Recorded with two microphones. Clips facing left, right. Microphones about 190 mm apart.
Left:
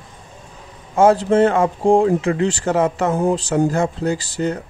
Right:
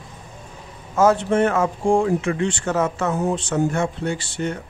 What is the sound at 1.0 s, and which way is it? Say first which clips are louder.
A man's voice: left 4 dB; 30° left (ahead or behind).